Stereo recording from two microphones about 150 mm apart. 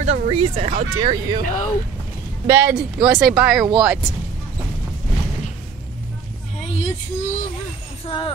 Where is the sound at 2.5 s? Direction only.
15° right (ahead or behind).